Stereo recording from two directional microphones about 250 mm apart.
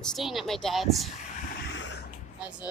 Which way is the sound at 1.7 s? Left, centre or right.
Left.